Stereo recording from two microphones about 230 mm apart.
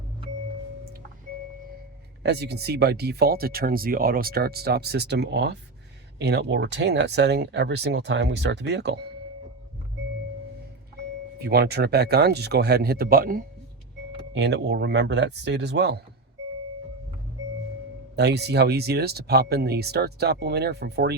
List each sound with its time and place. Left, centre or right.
2.2 s speech: right
11.3 s speech: right
18.2 s speech: right